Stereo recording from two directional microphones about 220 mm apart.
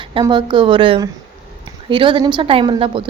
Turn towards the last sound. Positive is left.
turn(degrees=-20)  # may be behind; listen again after turning